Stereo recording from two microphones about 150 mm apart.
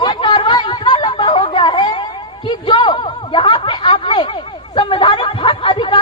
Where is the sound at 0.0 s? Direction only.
35° left (ahead or behind).